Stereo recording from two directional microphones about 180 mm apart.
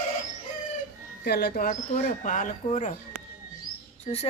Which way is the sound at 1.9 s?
45° left (ahead or behind).